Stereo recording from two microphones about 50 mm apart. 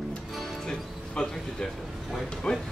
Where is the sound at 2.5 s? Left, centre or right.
Centre.